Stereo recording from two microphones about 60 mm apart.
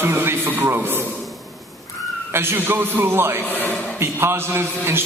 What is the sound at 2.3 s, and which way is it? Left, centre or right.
A man's voice, right.